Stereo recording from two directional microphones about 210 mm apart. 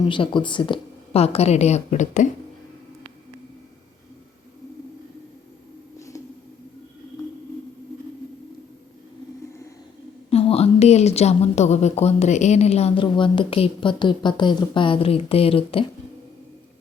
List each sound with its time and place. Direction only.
0.1 s a woman's voice: 25° left (ahead or behind)
6.0 s a sound: 15° left (ahead or behind)
10.2 s a woman's voice: 30° left (ahead or behind)